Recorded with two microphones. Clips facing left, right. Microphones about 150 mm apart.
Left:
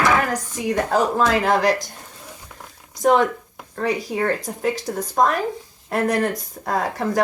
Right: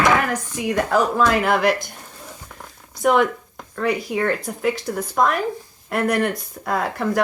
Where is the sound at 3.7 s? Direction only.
35° left (ahead or behind).